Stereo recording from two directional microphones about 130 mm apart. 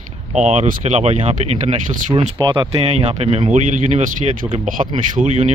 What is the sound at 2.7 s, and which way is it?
Speech, 50° right (ahead or behind).